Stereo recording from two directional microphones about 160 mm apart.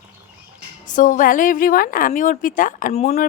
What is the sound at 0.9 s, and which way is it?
A woman's voice, 55° left (ahead or behind).